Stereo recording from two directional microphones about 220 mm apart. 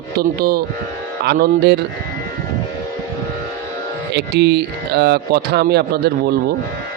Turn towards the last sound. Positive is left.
turn(degrees=-50)  # may be behind; listen again after turning